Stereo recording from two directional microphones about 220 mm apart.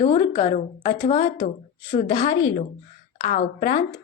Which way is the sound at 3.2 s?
35° left (ahead or behind).